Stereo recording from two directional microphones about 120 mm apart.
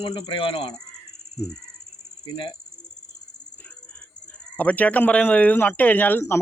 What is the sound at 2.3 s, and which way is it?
Speech, 45° left (ahead or behind).